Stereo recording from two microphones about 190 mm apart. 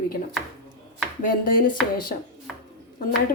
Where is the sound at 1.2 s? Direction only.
45° left (ahead or behind).